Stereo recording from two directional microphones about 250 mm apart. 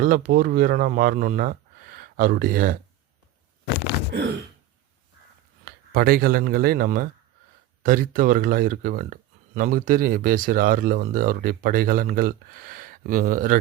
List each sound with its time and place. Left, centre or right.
0.0 s speech: right
5.6 s speech: right